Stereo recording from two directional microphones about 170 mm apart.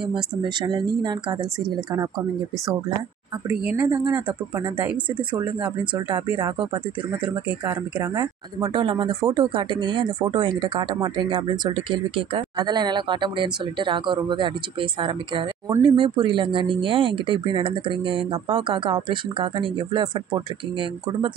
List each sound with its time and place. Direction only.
0.1 s speech: 25° right (ahead or behind)
3.4 s speech: 10° right (ahead or behind)
3.8 s speech: 25° right (ahead or behind)
5.9 s speech: 25° right (ahead or behind)